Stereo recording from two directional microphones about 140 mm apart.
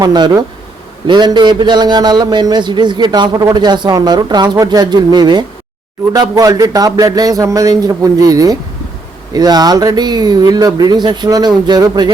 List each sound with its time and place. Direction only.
0.0 s a man's voice: 30° right (ahead or behind)